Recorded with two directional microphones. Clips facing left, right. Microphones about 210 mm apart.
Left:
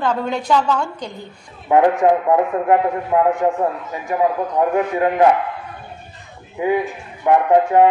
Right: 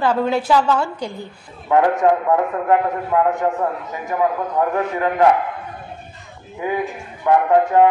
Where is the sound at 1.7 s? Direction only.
20° left (ahead or behind).